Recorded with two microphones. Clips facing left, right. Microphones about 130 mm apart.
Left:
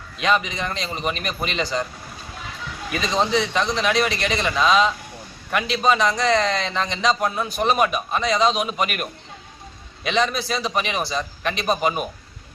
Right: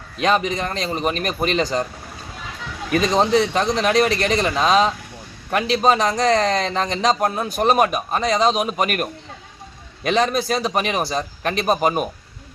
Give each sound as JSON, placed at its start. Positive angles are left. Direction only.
{"t": 0.2, "sound": "a man's voice", "side_deg": -40}
{"t": 2.9, "sound": "a man's voice", "side_deg": -45}